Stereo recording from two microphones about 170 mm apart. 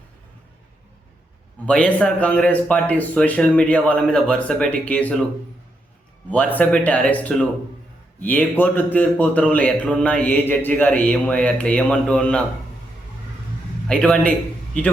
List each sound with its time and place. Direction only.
1.6 s speech: 5° left (ahead or behind)
6.3 s speech: 10° left (ahead or behind)
13.8 s a man's voice: 5° left (ahead or behind)